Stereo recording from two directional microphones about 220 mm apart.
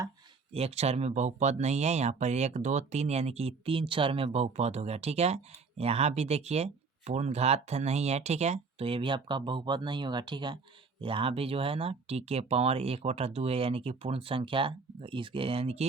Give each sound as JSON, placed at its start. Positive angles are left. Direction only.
{"t": 0.5, "sound": "speech", "side_deg": -30}